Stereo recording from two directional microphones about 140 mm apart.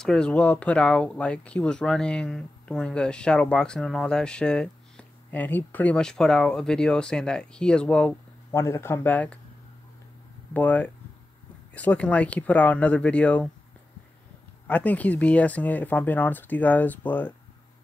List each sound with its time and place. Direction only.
0.0 s speech: 5° left (ahead or behind)
8.5 s speech: 20° left (ahead or behind)
10.5 s speech: 10° left (ahead or behind)
14.7 s speech: 10° left (ahead or behind)